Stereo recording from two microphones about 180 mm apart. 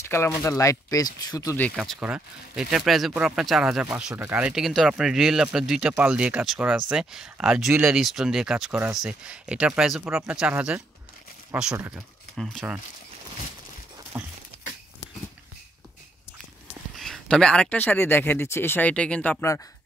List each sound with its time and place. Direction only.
0.0 s speech: 15° left (ahead or behind)
1.8 s speech: 5° right (ahead or behind)
14.1 s a sound: 10° right (ahead or behind)
16.9 s speech: centre (ahead or behind)